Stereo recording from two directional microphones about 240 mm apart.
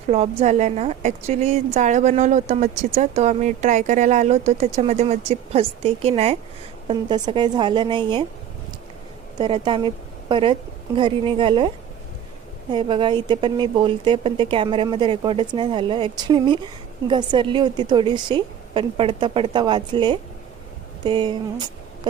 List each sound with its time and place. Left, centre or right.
0.1 s a woman's voice: right
9.4 s a woman's voice: right
12.7 s a woman's voice: centre